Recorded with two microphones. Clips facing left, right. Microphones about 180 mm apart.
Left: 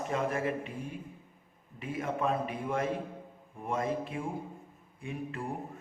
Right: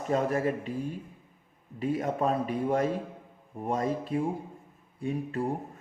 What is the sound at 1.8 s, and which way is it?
A man's voice, 40° right (ahead or behind).